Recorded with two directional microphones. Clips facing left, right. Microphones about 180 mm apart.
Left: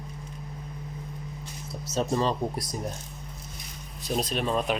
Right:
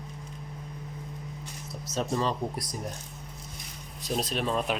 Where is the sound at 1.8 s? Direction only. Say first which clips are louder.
Left 3 dB; 30° left (ahead or behind).